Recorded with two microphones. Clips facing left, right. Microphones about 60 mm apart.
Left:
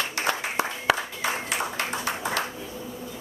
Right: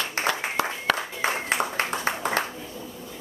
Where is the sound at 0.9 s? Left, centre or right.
Centre.